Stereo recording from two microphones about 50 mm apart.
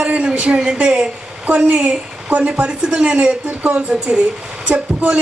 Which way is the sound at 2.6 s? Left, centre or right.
Centre.